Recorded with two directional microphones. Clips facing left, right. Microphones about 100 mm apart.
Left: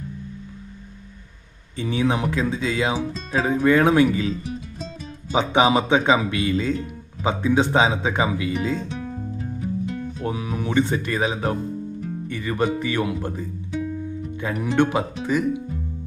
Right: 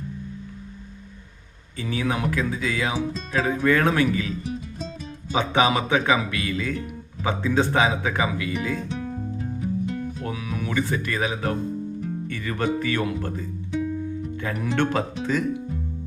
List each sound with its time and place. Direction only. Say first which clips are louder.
1.7 s speech: left 4 dB; 20° left (ahead or behind)
5.3 s speech: left 3 dB; 20° left (ahead or behind)
8.9 s music: right 1 dB; centre (ahead or behind)
10.2 s speech: left 7 dB; 25° left (ahead or behind)
13.7 s music: right 1 dB; centre (ahead or behind)
14.8 s speech: left 4 dB; 15° left (ahead or behind)